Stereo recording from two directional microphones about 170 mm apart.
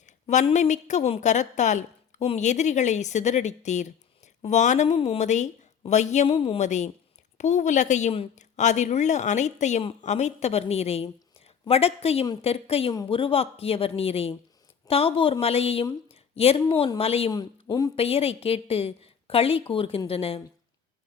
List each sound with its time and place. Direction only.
0.0 s a woman's voice: 45° left (ahead or behind)
17.3 s speech: 20° left (ahead or behind)
17.9 s speech: 35° left (ahead or behind)